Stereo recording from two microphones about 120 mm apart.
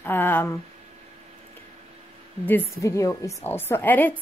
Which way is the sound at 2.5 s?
20° left (ahead or behind).